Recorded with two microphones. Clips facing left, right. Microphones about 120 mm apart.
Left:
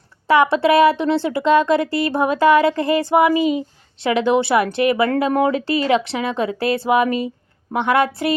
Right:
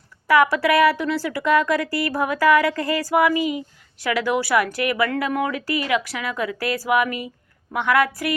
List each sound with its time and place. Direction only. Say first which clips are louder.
0.3 s speech: left 3 dB; 25° left (ahead or behind)